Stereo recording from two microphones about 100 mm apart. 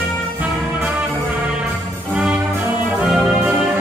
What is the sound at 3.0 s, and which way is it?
Music, 10° right (ahead or behind).